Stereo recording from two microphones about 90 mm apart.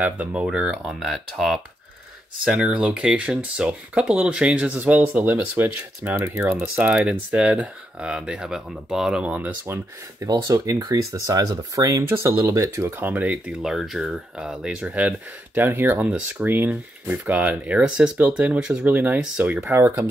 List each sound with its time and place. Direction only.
0.0 s speech: 15° right (ahead or behind)
6.7 s speech: 10° right (ahead or behind)
9.3 s speech: 20° right (ahead or behind)
10.2 s speech: 40° right (ahead or behind)
12.4 s speech: 40° right (ahead or behind)
13.0 s speech: 20° right (ahead or behind)